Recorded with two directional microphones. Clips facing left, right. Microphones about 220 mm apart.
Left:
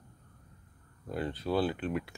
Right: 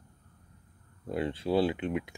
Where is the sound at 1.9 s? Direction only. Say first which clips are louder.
Right 2 dB; 15° right (ahead or behind).